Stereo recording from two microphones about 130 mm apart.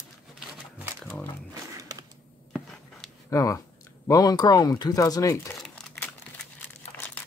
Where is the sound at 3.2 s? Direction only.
25° left (ahead or behind).